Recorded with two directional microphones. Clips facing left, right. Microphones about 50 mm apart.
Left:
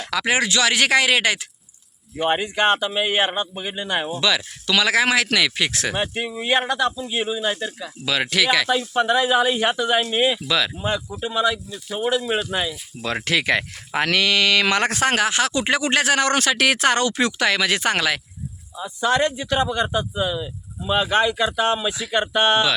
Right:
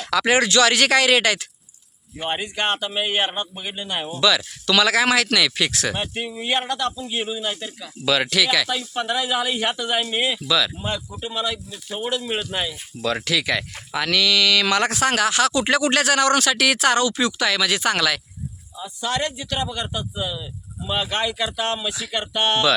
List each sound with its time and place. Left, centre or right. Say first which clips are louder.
0.0 s speech: right 2 dB; centre
2.9 s speech: left 2 dB; centre; by 5.9 s left
5.9 s speech: left 2 dB; centre
8.3 s speech: left 2 dB; left; by 10.4 s centre
10.4 s speech: right 1 dB; left
10.8 s speech: left 3 dB; centre
13.0 s speech: right 2 dB; centre
13.2 s speech: left 2 dB; left; by 22.7 s centre